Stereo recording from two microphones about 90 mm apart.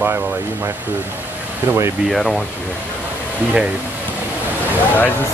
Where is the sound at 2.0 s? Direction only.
5° left (ahead or behind).